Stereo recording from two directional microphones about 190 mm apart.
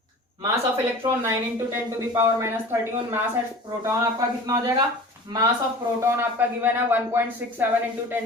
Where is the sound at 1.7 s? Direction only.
15° right (ahead or behind).